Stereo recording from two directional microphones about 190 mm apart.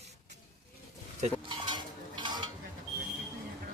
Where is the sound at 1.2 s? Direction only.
25° right (ahead or behind).